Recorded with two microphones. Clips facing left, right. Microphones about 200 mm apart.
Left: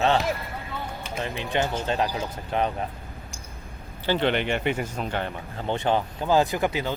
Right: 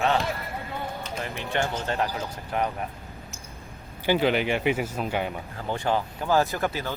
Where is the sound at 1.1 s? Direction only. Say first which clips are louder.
Left 4 dB; 15° left (ahead or behind).